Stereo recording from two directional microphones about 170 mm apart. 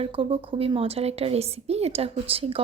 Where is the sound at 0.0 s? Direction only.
35° right (ahead or behind).